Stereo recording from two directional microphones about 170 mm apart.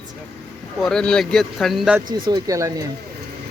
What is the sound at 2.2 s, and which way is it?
Speech, 20° right (ahead or behind).